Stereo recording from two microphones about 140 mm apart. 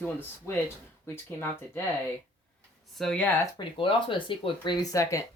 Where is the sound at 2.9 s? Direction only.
5° left (ahead or behind).